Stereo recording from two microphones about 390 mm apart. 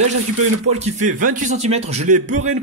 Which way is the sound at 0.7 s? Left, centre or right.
Centre.